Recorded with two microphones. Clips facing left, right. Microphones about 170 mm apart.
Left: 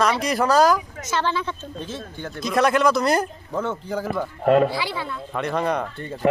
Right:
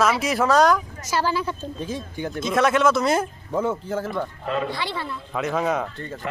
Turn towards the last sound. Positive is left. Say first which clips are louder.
# even
turn(degrees=-5)  # may be behind; listen again after turning